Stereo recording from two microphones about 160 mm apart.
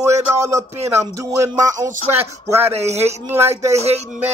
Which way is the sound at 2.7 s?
40° right (ahead or behind).